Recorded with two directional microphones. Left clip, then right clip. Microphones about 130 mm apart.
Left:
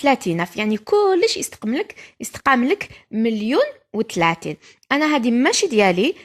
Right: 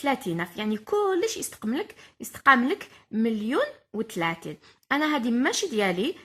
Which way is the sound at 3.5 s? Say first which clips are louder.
Left 8 dB; 40° left (ahead or behind).